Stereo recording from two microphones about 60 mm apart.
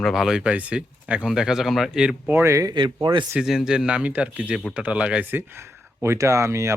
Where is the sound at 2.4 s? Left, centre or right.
Right.